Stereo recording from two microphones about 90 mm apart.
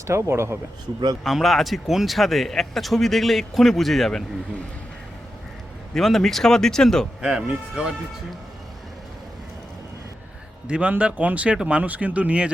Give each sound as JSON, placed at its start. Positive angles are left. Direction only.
{"t": 0.1, "sound": "speech", "side_deg": -30}
{"t": 1.2, "sound": "speech", "side_deg": 0}
{"t": 5.9, "sound": "speech", "side_deg": 5}
{"t": 7.2, "sound": "speech", "side_deg": -10}
{"t": 10.7, "sound": "speech", "side_deg": -15}